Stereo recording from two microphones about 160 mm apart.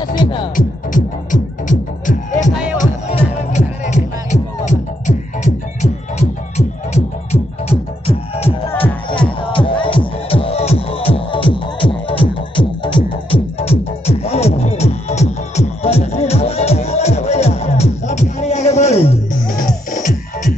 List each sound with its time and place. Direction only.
0.6 s music: 55° left (ahead or behind)
9.5 s music: 30° left (ahead or behind)
19.9 s music: 50° left (ahead or behind)